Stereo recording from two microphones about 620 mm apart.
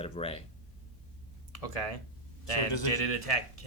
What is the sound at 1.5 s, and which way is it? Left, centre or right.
Speech, left.